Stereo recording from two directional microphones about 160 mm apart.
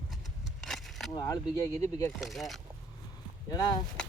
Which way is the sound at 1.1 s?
25° left (ahead or behind).